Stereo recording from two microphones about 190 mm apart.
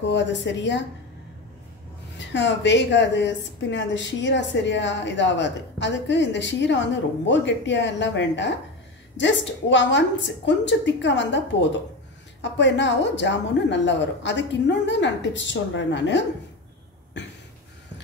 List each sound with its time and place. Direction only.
0.0 s a woman's voice: 70° left (ahead or behind)
2.1 s a woman's voice: 70° left (ahead or behind)